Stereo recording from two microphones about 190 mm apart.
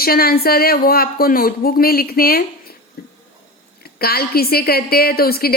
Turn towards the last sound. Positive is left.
turn(degrees=55)  # may be behind; listen again after turning